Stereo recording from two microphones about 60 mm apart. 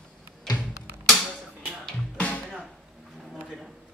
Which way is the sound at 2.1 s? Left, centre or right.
Left.